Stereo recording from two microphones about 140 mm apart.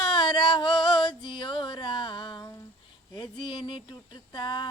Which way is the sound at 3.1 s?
35° left (ahead or behind).